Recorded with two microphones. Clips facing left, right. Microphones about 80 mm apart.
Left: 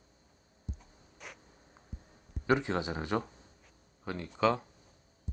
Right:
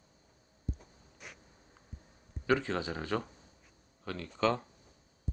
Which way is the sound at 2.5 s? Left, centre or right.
Centre.